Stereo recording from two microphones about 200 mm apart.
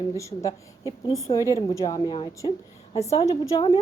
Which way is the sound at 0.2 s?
15° left (ahead or behind).